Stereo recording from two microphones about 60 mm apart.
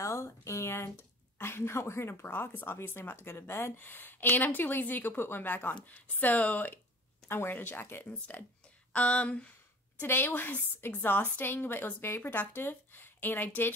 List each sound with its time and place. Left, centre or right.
0.0 s a woman's voice: left
7.2 s a woman's voice: left
8.1 s speech: left
9.9 s a woman's voice: left